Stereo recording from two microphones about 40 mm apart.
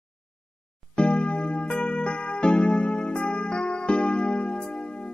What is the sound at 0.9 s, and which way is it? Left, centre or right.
Music, left.